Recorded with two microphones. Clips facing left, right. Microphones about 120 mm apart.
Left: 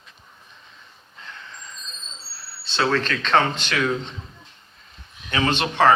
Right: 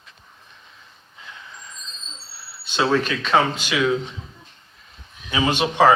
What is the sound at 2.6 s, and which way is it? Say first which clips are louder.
Speech: right 2 dB; 15° right (ahead or behind).